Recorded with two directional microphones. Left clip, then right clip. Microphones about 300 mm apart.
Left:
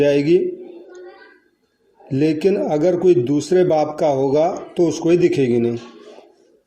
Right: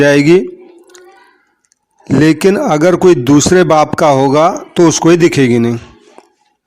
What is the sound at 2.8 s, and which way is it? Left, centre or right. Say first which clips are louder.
Speech: right 6 dB; right.